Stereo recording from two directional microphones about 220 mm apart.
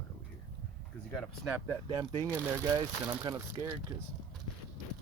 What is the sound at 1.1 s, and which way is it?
Speech, centre (ahead or behind).